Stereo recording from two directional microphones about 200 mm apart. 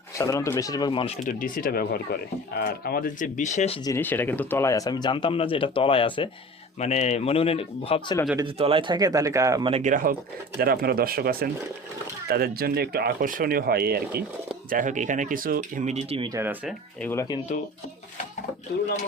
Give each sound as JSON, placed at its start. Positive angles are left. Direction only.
{"t": 0.2, "sound": "speech", "side_deg": 15}
{"t": 3.8, "sound": "speech", "side_deg": 10}
{"t": 8.4, "sound": "speech", "side_deg": -25}
{"t": 9.6, "sound": "speech", "side_deg": -30}
{"t": 9.9, "sound": "speech", "side_deg": -45}
{"t": 16.3, "sound": "speech", "side_deg": -10}
{"t": 17.0, "sound": "speech", "side_deg": 15}